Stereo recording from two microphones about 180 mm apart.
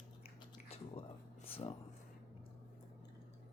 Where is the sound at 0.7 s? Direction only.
35° left (ahead or behind).